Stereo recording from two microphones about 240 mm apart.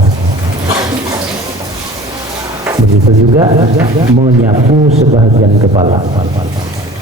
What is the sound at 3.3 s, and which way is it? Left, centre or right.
Speech, centre.